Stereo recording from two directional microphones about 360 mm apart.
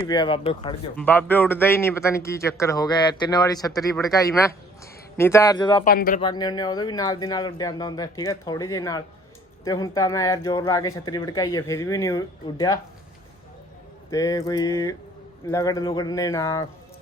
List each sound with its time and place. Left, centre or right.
0.1 s speech: centre
14.1 s speech: centre